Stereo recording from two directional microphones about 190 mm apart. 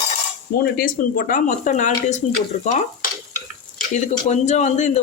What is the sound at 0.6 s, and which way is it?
Speech, 50° left (ahead or behind).